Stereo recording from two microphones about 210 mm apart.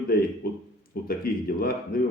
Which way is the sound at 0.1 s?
45° left (ahead or behind).